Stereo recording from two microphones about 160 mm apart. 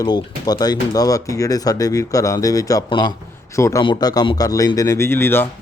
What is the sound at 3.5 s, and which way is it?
Speech, 20° left (ahead or behind).